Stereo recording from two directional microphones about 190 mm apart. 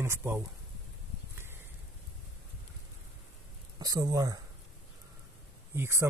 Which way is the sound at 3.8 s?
20° right (ahead or behind).